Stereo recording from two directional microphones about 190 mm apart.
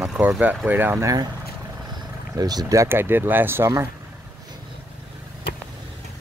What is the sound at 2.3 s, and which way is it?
Speech, 20° right (ahead or behind).